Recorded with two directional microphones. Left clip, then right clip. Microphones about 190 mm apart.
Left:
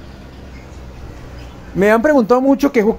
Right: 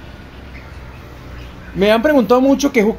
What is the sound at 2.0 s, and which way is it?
Speech, 50° left (ahead or behind).